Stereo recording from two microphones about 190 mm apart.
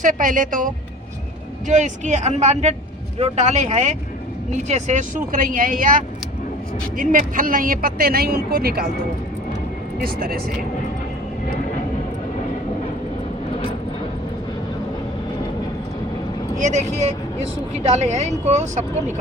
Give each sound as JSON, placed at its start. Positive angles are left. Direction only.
{"t": 0.0, "sound": "speech", "side_deg": -45}
{"t": 10.0, "sound": "speech", "side_deg": -50}
{"t": 16.6, "sound": "speech", "side_deg": -40}